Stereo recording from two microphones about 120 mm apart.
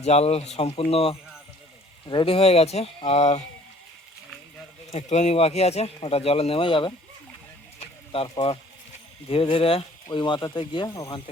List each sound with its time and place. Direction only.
0.0 s speech: 60° left (ahead or behind)
4.9 s speech: 70° left (ahead or behind); by 6.9 s 45° left (ahead or behind)
7.8 s a sound: 50° left (ahead or behind)
9.3 s speech: 50° left (ahead or behind); by 11.2 s 35° left (ahead or behind)